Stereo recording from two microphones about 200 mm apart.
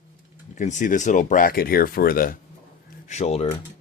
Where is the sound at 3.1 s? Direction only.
35° left (ahead or behind).